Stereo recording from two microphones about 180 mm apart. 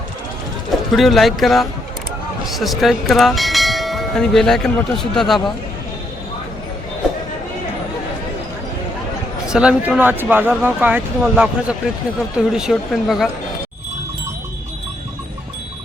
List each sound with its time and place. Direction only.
0.9 s speech: centre (ahead or behind)
9.5 s speech: 5° right (ahead or behind)